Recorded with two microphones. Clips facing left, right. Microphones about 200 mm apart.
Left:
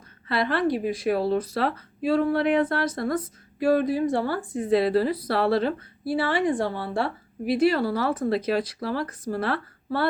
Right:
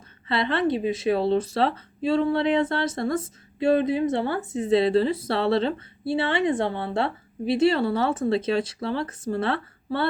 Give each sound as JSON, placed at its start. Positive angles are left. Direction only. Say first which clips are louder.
{"t": 0.3, "sound": "speech", "louder": "even", "side_deg": -25}